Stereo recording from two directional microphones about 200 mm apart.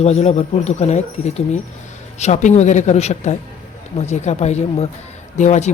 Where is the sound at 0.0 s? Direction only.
30° left (ahead or behind).